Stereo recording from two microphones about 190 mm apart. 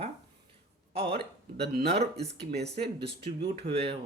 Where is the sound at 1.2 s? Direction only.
60° right (ahead or behind).